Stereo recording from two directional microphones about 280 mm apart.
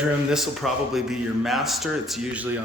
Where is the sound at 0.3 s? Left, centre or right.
Centre.